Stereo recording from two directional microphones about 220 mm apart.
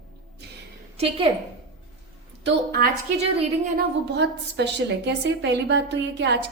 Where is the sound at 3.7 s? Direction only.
50° right (ahead or behind).